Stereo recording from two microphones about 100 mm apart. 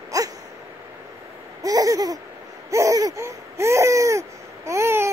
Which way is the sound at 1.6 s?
35° right (ahead or behind).